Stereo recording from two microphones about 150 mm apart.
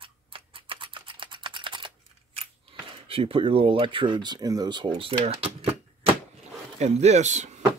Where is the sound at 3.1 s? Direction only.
40° right (ahead or behind).